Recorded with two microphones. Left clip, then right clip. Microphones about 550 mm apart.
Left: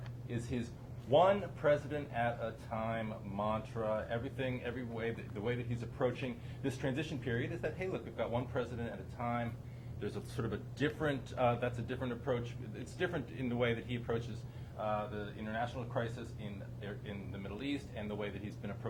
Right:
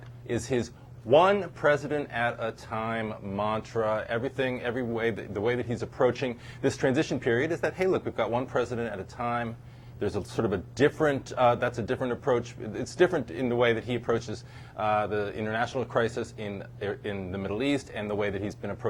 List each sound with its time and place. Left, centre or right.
1.1 s speech: right
14.8 s speech: right